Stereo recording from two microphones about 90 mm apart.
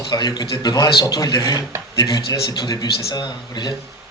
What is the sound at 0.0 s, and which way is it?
A man's voice, 50° left (ahead or behind).